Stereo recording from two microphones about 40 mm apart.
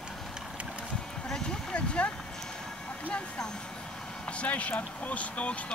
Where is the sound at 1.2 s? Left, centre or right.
Centre.